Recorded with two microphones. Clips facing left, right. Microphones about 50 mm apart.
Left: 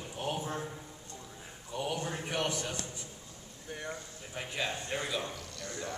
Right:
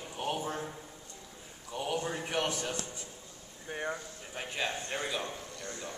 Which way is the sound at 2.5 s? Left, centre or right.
Right.